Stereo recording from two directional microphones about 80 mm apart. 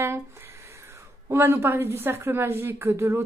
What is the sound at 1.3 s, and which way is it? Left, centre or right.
A woman's voice, right.